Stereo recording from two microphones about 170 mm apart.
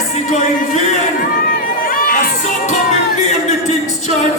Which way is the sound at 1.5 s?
55° left (ahead or behind).